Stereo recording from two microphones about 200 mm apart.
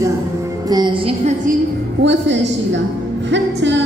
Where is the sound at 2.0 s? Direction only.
60° right (ahead or behind).